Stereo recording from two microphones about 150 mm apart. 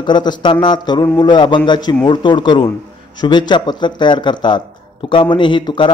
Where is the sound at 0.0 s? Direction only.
30° left (ahead or behind).